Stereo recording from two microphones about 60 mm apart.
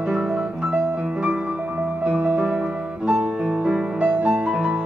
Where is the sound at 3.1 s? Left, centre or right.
Centre.